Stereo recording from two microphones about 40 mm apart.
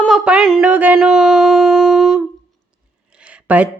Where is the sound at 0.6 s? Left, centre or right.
Right.